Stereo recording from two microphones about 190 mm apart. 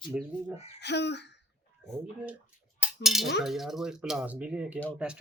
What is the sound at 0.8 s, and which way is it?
Speech, 65° left (ahead or behind).